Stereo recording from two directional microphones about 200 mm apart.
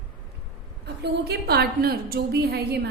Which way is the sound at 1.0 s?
55° right (ahead or behind).